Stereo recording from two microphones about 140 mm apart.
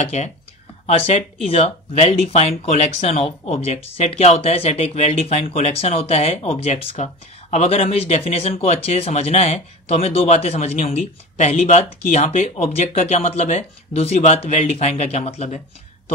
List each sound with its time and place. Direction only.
0.0 s speech: 55° left (ahead or behind)